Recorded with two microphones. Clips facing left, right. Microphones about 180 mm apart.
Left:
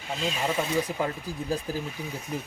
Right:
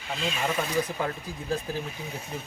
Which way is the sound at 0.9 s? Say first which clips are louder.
Left 2 dB; 10° left (ahead or behind).